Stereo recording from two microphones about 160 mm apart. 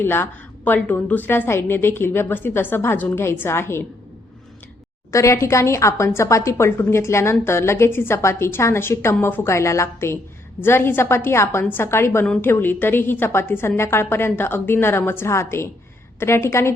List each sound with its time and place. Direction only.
0.0 s a woman's voice: 15° left (ahead or behind)
5.1 s a woman's voice: 20° left (ahead or behind)